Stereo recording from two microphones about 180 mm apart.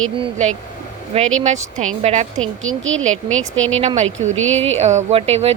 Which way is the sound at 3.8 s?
40° right (ahead or behind).